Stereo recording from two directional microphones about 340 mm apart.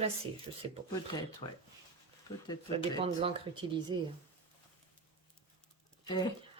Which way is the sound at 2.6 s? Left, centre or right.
Centre.